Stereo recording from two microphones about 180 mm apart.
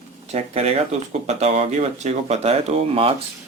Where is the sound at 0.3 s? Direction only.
35° right (ahead or behind).